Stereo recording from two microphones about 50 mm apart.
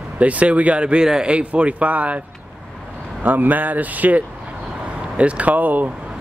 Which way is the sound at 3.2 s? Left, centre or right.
Right.